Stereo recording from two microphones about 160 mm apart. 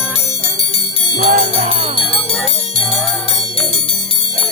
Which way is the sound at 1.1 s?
60° right (ahead or behind).